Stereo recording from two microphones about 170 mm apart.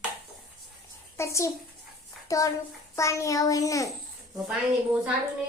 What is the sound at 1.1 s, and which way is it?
A child's voice, 15° left (ahead or behind).